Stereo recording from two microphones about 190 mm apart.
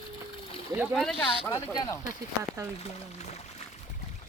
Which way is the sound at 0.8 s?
Centre (ahead or behind).